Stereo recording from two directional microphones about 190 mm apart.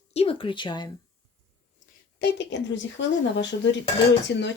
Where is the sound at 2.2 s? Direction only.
70° left (ahead or behind).